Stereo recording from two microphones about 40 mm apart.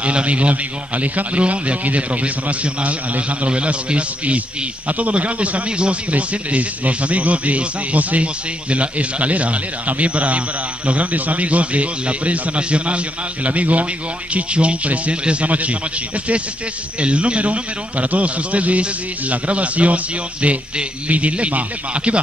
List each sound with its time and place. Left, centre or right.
0.0 s a man's voice: right
17.0 s a man's voice: right